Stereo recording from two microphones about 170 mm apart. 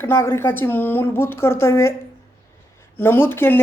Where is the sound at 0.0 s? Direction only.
15° left (ahead or behind).